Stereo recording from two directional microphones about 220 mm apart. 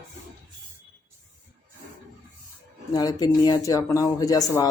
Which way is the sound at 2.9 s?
15° left (ahead or behind).